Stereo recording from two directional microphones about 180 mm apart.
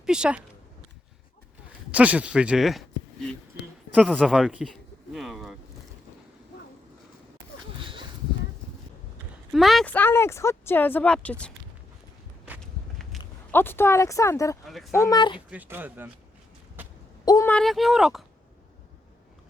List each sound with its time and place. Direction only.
0.0 s speech: 5° right (ahead or behind)
1.9 s speech: 10° right (ahead or behind)
3.9 s speech: 5° right (ahead or behind)
4.2 s a sound: centre (ahead or behind)
7.8 s a sound: 30° right (ahead or behind)
9.5 s speech: centre (ahead or behind)
13.1 s a sound: centre (ahead or behind)
13.5 s speech: 10° left (ahead or behind)
14.6 s speech: centre (ahead or behind)
14.9 s speech: 20° left (ahead or behind)
15.4 s speech: 10° right (ahead or behind)
17.2 s a sound: 20° left (ahead or behind)
17.5 s speech: centre (ahead or behind)